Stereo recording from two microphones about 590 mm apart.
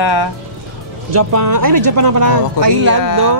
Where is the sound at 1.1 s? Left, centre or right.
Right.